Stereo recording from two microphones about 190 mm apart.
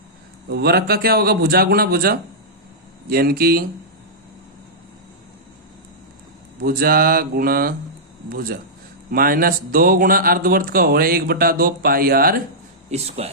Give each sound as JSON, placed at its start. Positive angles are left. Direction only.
{"t": 0.5, "sound": "speech", "side_deg": -55}
{"t": 6.6, "sound": "speech", "side_deg": -50}
{"t": 12.9, "sound": "speech", "side_deg": -35}